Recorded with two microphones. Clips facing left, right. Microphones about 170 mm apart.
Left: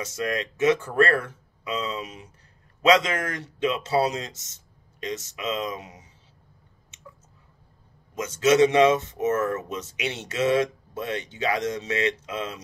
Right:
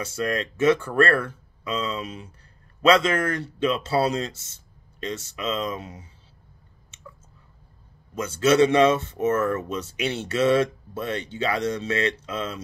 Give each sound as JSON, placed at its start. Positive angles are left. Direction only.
{"t": 0.0, "sound": "speech", "side_deg": 20}
{"t": 8.1, "sound": "speech", "side_deg": 20}